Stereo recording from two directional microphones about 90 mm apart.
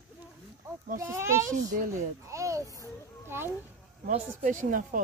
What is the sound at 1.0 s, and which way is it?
A child's voice, 30° right (ahead or behind).